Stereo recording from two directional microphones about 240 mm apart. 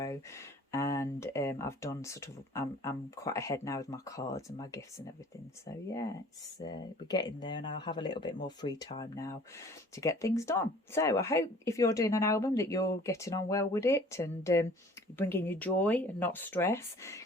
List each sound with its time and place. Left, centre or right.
0.0 s speech: centre